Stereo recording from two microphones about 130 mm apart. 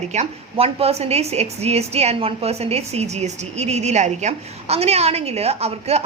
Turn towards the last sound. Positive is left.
turn(degrees=-55)  # may be behind; listen again after turning